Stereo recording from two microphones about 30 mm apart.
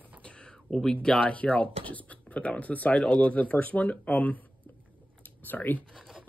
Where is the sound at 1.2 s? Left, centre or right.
Left.